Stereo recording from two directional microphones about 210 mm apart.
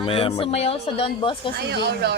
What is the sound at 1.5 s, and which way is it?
Speech, 50° right (ahead or behind).